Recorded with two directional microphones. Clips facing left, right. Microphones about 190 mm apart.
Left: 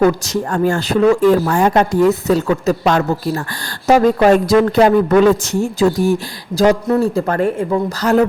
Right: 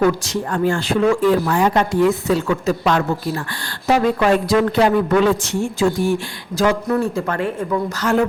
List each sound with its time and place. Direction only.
0.0 s speech: 45° left (ahead or behind)